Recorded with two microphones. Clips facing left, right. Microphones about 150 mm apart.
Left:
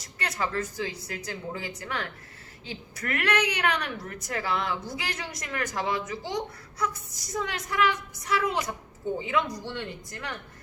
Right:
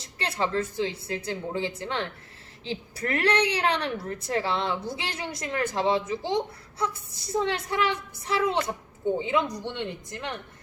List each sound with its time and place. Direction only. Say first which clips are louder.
0.0 s a woman's voice: right 3 dB; 30° right (ahead or behind)